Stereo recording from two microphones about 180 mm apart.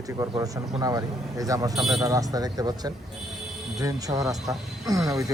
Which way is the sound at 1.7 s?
Centre (ahead or behind).